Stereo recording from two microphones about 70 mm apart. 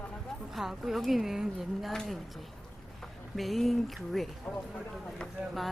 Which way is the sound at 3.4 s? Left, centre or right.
Centre.